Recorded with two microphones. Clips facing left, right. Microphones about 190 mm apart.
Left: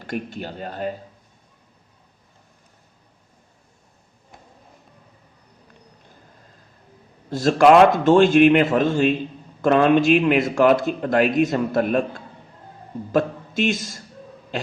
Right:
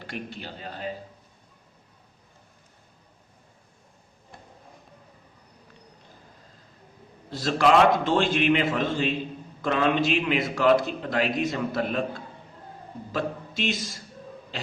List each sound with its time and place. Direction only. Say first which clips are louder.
0.1 s a man's voice: left 8 dB; 45° left (ahead or behind)
7.3 s a man's voice: left 7 dB; 45° left (ahead or behind)
13.1 s a man's voice: left 8 dB; 50° left (ahead or behind)